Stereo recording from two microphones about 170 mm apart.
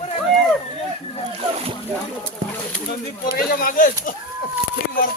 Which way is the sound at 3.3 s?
60° left (ahead or behind).